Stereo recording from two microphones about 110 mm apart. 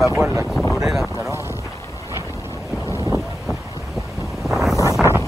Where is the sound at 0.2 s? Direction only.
25° right (ahead or behind).